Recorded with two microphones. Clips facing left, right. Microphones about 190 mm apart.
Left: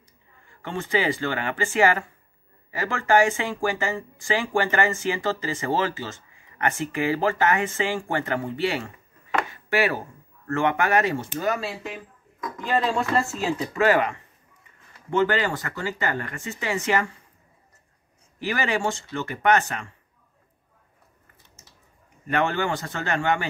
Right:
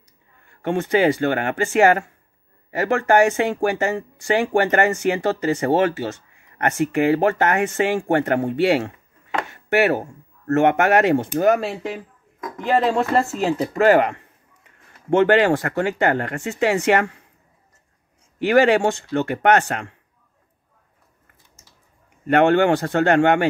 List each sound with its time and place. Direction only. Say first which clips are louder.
0.5 s speech: right 7 dB; 60° right (ahead or behind)
9.5 s a sound: right 8 dB; 65° right (ahead or behind)
10.5 s speech: right 6 dB; 65° right (ahead or behind)
18.4 s speech: right 10 dB; 60° right (ahead or behind)
22.3 s speech: right 9 dB; 65° right (ahead or behind)